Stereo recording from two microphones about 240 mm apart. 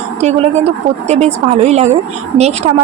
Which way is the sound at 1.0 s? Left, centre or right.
Right.